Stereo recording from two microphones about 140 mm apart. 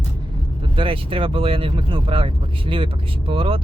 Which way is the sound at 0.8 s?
40° right (ahead or behind).